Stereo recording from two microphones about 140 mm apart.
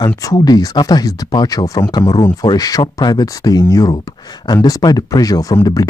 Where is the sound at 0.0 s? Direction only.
30° left (ahead or behind).